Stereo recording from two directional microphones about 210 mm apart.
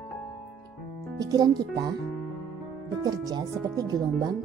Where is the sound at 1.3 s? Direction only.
20° right (ahead or behind).